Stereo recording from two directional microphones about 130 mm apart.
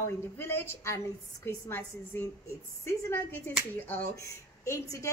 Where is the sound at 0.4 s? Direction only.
20° left (ahead or behind).